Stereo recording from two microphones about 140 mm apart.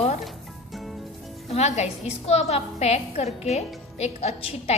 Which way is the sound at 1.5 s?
50° left (ahead or behind).